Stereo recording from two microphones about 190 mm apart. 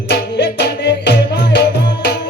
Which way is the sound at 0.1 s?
65° left (ahead or behind).